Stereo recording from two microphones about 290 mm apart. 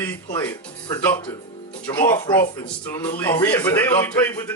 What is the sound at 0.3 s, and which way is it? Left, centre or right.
A man's voice, centre.